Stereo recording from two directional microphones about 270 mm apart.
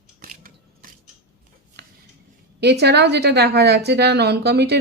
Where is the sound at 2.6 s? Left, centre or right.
Right.